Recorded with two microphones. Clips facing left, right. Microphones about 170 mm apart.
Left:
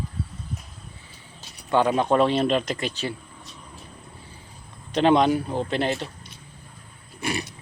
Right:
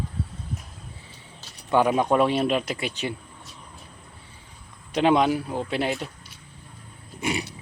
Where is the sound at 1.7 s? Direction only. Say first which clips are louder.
Even; 10° right (ahead or behind).